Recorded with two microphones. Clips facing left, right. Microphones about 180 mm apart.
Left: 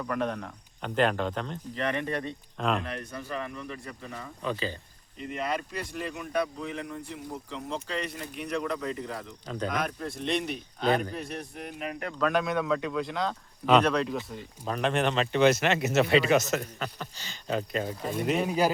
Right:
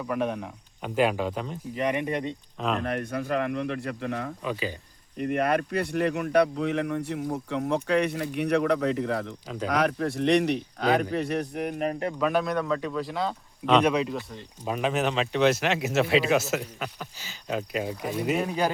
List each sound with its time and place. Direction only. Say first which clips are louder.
0.0 s speech: right 2 dB; 10° right (ahead or behind)
2.6 s speech: even; centre (ahead or behind)
2.8 s speech: right 8 dB; 55° right (ahead or behind); by 4.3 s 70° right (ahead or behind)
5.1 s speech: right 7 dB; 55° right (ahead or behind)
12.2 s speech: even; centre (ahead or behind)